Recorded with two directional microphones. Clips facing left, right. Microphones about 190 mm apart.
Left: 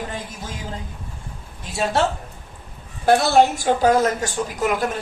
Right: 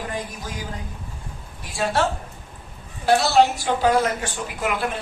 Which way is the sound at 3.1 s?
50° left (ahead or behind).